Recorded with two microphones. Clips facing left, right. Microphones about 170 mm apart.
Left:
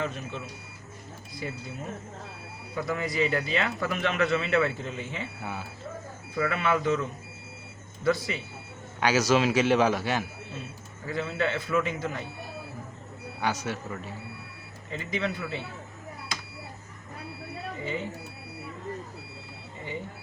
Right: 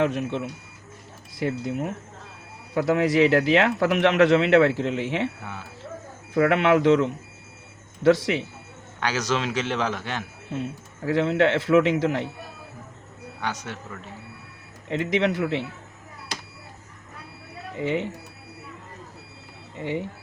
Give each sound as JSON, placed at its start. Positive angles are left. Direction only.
{"t": 0.0, "sound": "speech", "side_deg": -70}
{"t": 1.4, "sound": "speech", "side_deg": -85}
{"t": 5.4, "sound": "a man's voice", "side_deg": 10}
{"t": 6.3, "sound": "speech", "side_deg": -70}
{"t": 9.0, "sound": "a man's voice", "side_deg": 10}
{"t": 11.0, "sound": "speech", "side_deg": -75}
{"t": 13.4, "sound": "a man's voice", "side_deg": 10}
{"t": 14.8, "sound": "speech", "side_deg": -75}
{"t": 17.7, "sound": "speech", "side_deg": -75}
{"t": 19.8, "sound": "speech", "side_deg": -75}